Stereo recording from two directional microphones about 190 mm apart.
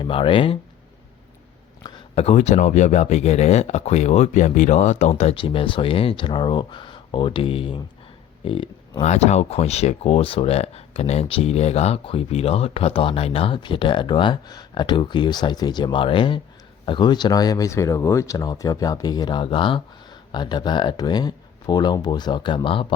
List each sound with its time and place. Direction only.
0.0 s speech: 30° left (ahead or behind)
1.8 s speech: 30° left (ahead or behind)